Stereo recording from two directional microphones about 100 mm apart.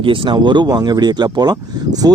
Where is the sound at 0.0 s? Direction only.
60° right (ahead or behind).